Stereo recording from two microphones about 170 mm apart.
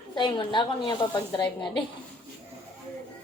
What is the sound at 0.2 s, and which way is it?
A woman's voice, 25° left (ahead or behind).